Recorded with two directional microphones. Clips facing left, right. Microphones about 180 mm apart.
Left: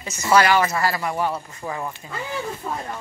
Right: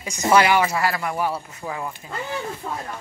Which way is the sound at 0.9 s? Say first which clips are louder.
Left 1 dB; centre (ahead or behind).